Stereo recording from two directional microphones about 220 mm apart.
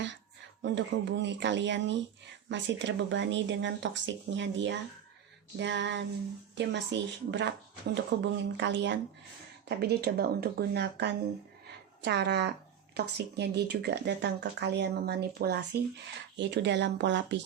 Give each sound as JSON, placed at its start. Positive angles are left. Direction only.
{"t": 0.6, "sound": "speech", "side_deg": -55}